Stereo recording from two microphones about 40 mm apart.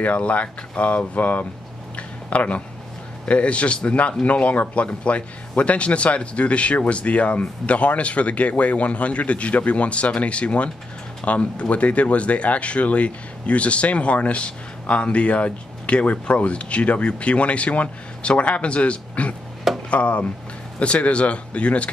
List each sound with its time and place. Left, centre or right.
0.0 s speech: left
2.0 s a sound: left
3.3 s speech: left